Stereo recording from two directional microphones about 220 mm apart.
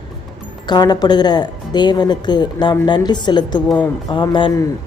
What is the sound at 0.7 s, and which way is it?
A woman's voice, 20° left (ahead or behind).